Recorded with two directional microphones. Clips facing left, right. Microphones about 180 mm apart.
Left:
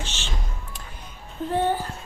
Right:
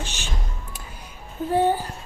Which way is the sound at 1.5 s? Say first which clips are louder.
Right 3 dB; 10° right (ahead or behind).